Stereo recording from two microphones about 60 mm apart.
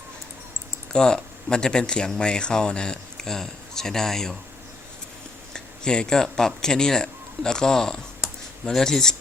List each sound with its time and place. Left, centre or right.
0.9 s speech: centre
5.5 s a sound: centre
6.3 s speech: centre